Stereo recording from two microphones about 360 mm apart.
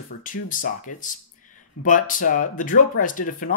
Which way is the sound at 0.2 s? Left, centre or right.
Left.